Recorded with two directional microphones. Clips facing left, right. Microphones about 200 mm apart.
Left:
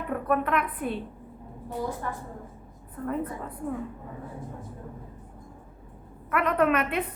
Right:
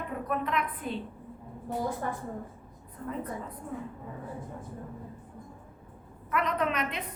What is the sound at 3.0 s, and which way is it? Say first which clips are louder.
Speech: left 6 dB; 55° left (ahead or behind).